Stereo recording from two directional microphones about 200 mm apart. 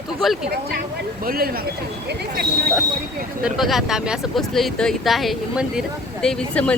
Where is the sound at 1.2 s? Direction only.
45° right (ahead or behind).